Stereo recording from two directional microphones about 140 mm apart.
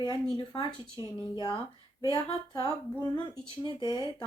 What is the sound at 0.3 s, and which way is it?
Speech, 35° left (ahead or behind).